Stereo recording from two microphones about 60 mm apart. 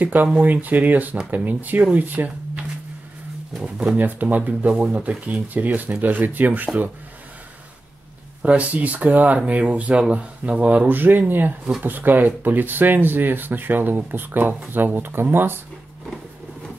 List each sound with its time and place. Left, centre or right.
0.0 s speech: right
3.9 s speech: right
8.4 s speech: right
10.9 s speech: right